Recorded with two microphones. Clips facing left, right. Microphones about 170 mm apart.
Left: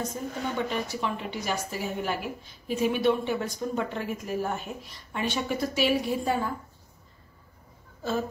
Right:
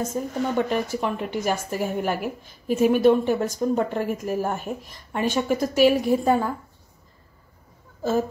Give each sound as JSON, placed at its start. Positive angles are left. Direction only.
{"t": 0.0, "sound": "speech", "side_deg": -45}